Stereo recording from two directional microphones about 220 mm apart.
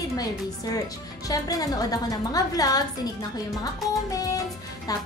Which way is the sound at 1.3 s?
15° left (ahead or behind).